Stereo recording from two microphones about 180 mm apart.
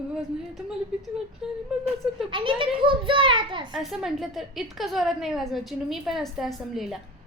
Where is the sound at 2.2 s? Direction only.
30° right (ahead or behind).